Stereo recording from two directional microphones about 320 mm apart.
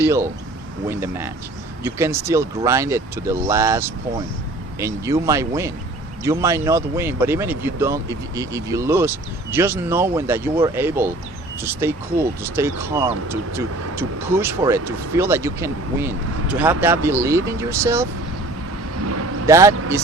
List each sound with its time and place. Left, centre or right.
0.0 s speech: centre
19.0 s vehicle: right
19.5 s speech: centre